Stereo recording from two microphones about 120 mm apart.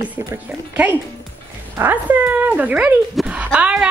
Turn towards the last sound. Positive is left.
turn(degrees=-10)  # may be behind; listen again after turning